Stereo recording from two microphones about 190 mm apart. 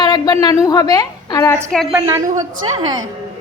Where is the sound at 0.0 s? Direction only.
20° left (ahead or behind).